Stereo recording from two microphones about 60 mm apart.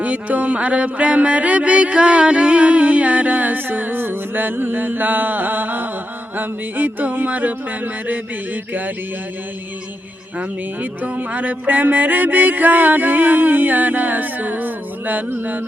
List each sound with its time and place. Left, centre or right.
0.0 s music: right
11.0 s music: right